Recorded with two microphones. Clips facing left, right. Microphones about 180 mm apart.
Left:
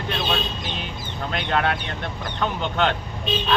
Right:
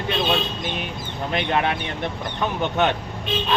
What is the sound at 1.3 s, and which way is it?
Speech, 15° right (ahead or behind).